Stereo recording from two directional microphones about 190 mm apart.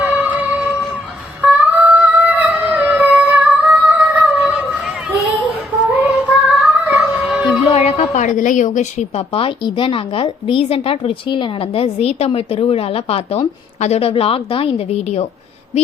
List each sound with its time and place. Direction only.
0.0 s music: 10° right (ahead or behind)
4.8 s a sound: 5° right (ahead or behind)
6.0 s child singing: 5° right (ahead or behind)
7.7 s a woman's voice: 35° left (ahead or behind)